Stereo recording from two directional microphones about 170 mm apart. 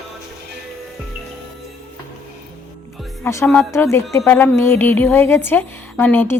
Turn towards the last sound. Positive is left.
turn(degrees=10)  # may be behind; listen again after turning